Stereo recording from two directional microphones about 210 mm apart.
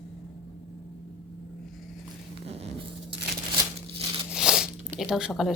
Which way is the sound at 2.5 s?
30° right (ahead or behind).